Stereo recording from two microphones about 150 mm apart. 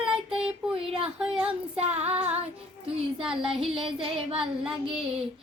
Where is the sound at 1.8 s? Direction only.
45° right (ahead or behind).